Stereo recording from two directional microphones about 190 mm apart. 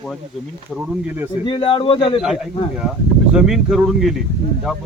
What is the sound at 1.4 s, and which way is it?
Speech, 25° left (ahead or behind).